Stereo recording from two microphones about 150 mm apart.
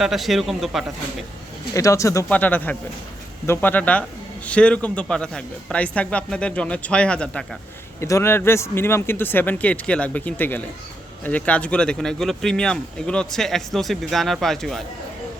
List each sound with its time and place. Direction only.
0.0 s speech: centre (ahead or behind)
1.7 s speech: 20° left (ahead or behind)
8.0 s speech: 20° left (ahead or behind); by 14.8 s centre (ahead or behind)